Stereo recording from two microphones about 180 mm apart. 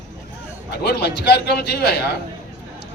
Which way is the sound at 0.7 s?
65° left (ahead or behind).